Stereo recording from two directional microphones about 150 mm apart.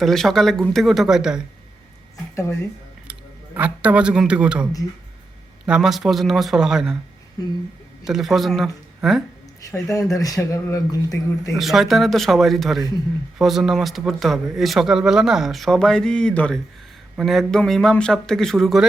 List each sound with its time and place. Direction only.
0.0 s speech: centre (ahead or behind)
2.3 s speech: 20° left (ahead or behind)
3.1 s a man's voice: 10° right (ahead or behind)
8.0 s speech: centre (ahead or behind)
9.7 s speech: 20° left (ahead or behind)
11.5 s speech: centre (ahead or behind)